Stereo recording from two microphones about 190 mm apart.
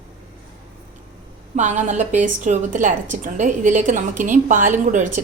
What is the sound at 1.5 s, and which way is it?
A woman's voice, 40° right (ahead or behind).